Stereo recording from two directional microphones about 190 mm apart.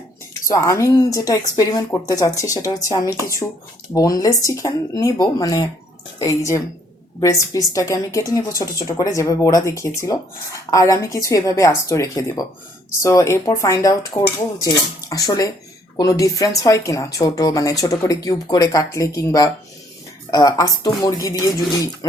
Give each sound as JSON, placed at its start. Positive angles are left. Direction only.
{"t": 0.4, "sound": "a woman's voice", "side_deg": 20}